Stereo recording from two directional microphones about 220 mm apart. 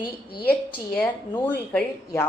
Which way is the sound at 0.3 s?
45° left (ahead or behind).